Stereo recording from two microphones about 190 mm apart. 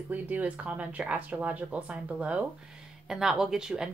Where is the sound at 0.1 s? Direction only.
10° right (ahead or behind).